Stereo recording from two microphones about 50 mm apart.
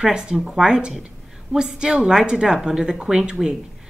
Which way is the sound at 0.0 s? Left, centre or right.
Centre.